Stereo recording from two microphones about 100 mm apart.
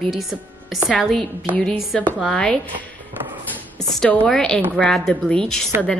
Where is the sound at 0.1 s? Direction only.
Centre (ahead or behind).